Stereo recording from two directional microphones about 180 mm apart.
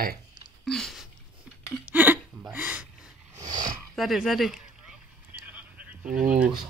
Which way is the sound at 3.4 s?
20° right (ahead or behind).